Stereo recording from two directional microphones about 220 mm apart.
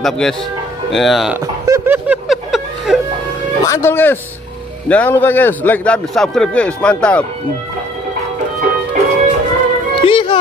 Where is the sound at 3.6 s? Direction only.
10° left (ahead or behind).